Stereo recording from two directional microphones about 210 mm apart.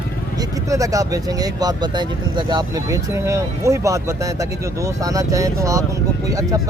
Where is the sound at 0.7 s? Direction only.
15° right (ahead or behind).